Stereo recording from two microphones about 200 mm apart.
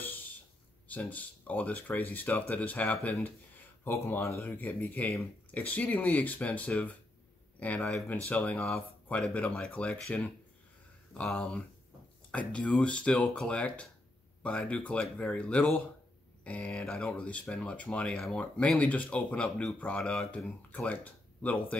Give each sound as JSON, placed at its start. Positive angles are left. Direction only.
{"t": 0.8, "sound": "speech", "side_deg": 5}